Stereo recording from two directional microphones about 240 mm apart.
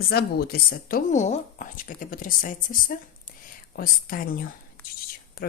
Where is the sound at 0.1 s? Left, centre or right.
Left.